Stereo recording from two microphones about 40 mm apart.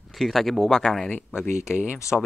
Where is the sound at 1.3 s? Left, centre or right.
Left.